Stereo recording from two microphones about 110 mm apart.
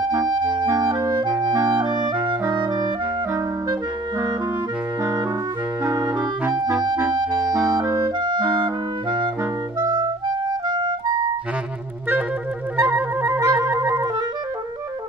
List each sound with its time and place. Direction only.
0.1 s clarinet: 35° right (ahead or behind)
5.9 s clarinet: 30° right (ahead or behind)
7.2 s music: 10° right (ahead or behind)
7.8 s clarinet: 35° right (ahead or behind)
9.8 s clarinet: 40° right (ahead or behind)
12.7 s music: 15° right (ahead or behind)